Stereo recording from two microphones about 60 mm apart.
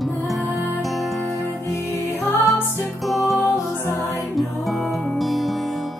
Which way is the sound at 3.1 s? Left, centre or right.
Centre.